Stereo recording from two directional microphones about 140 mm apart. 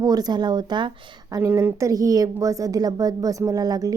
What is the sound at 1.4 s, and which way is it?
A woman's voice, 15° right (ahead or behind).